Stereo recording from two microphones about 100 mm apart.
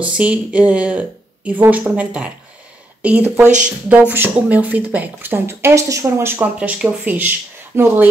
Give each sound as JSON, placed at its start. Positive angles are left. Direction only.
{"t": 0.0, "sound": "speech", "side_deg": -15}